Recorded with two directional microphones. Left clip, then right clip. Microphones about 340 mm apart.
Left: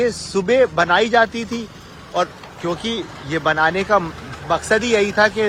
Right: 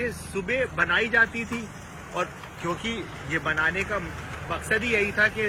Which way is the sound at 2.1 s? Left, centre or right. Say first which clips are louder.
Left 9 dB; centre.